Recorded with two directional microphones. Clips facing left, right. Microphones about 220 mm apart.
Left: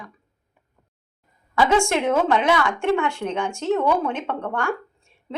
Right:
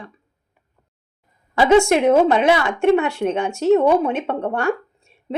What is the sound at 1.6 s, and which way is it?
Speech, 25° right (ahead or behind).